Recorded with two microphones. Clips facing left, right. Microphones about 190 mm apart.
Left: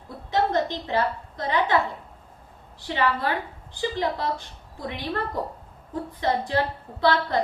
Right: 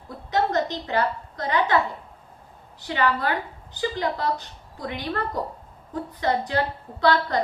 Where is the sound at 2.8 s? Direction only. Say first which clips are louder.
Right 1 dB; 25° left (ahead or behind).